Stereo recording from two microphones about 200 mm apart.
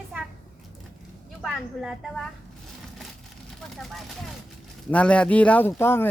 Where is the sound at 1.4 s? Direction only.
Centre (ahead or behind).